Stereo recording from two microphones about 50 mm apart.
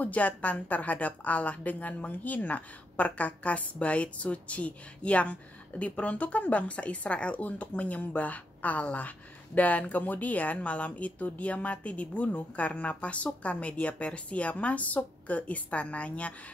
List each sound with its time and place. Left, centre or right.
0.0 s a woman's voice: left